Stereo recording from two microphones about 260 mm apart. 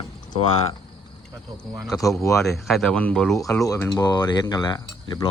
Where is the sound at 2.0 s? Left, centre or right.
Centre.